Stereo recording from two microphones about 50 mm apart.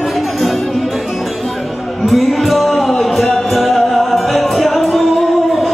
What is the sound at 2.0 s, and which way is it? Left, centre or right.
Music, centre.